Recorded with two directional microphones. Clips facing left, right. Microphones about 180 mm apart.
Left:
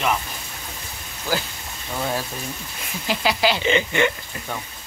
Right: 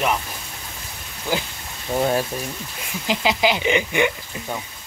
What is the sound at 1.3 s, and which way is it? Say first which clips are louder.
Speech: right 1 dB; 20° right (ahead or behind).